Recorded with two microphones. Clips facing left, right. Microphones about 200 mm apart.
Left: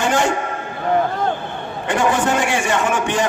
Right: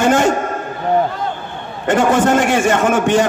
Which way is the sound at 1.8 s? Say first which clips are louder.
Right 5 dB; 45° right (ahead or behind).